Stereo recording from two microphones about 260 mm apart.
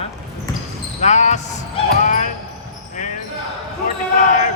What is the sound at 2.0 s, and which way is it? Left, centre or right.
Basketball bounce, left.